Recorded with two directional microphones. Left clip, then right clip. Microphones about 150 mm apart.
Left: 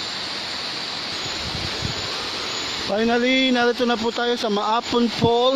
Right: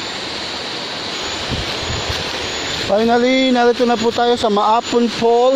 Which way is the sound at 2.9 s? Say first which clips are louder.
Right 6 dB; 30° left (ahead or behind).